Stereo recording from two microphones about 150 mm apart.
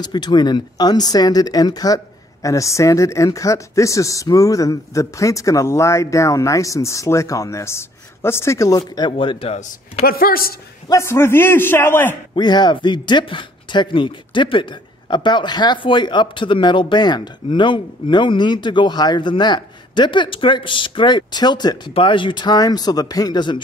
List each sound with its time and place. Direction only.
0.0 s speech: 30° left (ahead or behind)
9.1 s speech: 35° left (ahead or behind)
10.0 s speech: 80° left
10.9 s a man's voice: 20° left (ahead or behind)
12.4 s speech: 30° left (ahead or behind)